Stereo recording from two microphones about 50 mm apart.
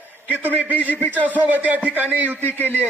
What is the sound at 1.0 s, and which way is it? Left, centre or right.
Speech, right.